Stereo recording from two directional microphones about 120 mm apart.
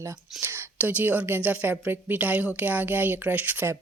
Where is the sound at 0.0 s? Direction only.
20° right (ahead or behind).